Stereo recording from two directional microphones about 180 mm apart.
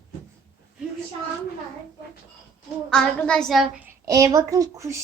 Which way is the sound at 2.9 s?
5° left (ahead or behind).